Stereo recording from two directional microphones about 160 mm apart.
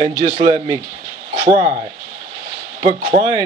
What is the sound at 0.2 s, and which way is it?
Speech, 30° right (ahead or behind).